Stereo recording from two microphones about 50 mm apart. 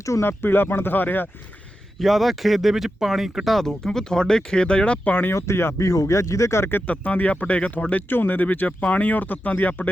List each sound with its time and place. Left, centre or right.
0.2 s speech: left
2.0 s speech: centre; by 5.3 s left
5.3 s speech: left
6.8 s speech: left
8.1 s speech: left